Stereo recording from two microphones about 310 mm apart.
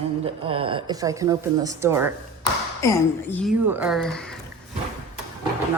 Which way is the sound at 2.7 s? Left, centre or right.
Centre.